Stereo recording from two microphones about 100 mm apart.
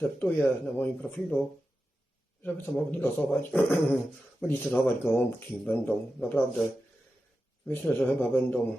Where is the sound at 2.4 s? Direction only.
20° left (ahead or behind).